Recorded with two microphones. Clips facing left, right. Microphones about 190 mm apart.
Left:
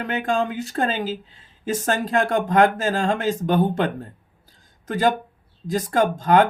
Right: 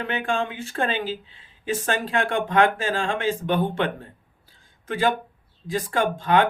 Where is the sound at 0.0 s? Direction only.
40° left (ahead or behind).